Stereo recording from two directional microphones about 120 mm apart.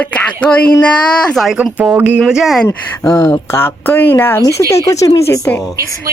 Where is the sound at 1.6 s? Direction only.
10° right (ahead or behind).